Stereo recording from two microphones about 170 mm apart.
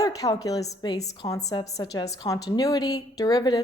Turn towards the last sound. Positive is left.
turn(degrees=25)  # may be behind; listen again after turning